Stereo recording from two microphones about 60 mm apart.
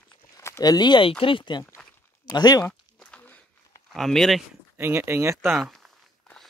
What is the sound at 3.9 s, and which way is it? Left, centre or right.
Speech, centre.